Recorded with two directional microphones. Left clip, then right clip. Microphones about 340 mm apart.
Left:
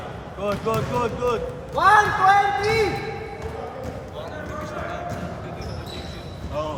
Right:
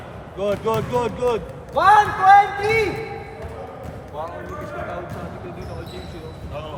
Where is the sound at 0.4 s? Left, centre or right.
Right.